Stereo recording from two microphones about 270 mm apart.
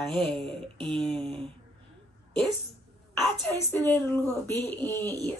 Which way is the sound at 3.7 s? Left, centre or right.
Centre.